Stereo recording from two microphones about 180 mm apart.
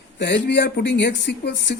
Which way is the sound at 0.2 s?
70° left (ahead or behind).